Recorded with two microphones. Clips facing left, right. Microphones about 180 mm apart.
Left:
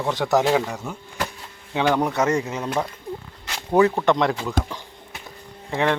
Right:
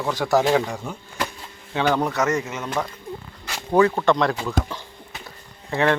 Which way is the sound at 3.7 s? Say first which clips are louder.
Even; 15° left (ahead or behind).